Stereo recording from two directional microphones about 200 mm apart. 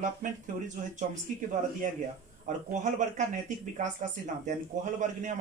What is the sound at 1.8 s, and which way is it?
Speech, 40° right (ahead or behind).